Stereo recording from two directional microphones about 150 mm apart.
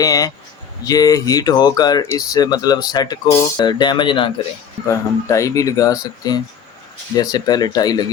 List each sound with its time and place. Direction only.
0.0 s speech: 25° left (ahead or behind)
4.9 s speech: 20° left (ahead or behind)